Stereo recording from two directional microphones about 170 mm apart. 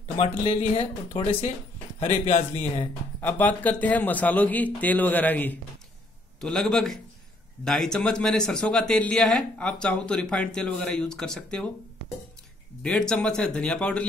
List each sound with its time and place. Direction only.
0.4 s speech: 35° left (ahead or behind)
2.0 s speech: 45° left (ahead or behind)
3.2 s speech: 10° left (ahead or behind)
12.8 s speech: 5° left (ahead or behind)